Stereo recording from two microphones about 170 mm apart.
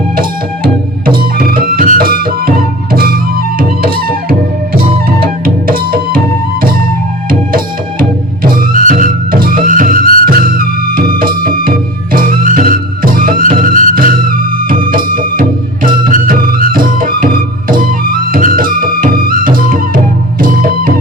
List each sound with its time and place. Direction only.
0.2 s music: 60° right (ahead or behind)
7.3 s music: 55° right (ahead or behind)